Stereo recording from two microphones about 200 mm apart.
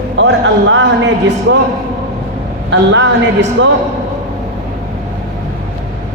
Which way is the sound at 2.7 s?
65° right (ahead or behind).